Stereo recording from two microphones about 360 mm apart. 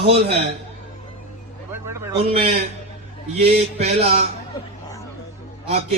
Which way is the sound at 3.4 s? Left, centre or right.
Centre.